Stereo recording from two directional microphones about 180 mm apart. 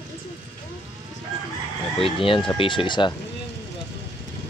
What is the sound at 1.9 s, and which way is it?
Speech, 30° left (ahead or behind).